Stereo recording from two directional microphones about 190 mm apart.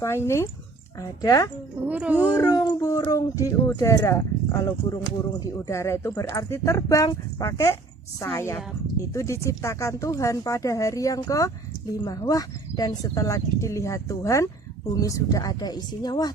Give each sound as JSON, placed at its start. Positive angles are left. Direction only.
{"t": 0.0, "sound": "speech", "side_deg": 15}
{"t": 1.9, "sound": "speech", "side_deg": -10}
{"t": 2.4, "sound": "speech", "side_deg": 20}